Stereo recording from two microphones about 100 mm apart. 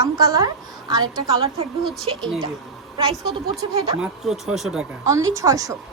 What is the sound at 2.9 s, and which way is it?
Speech, 55° right (ahead or behind).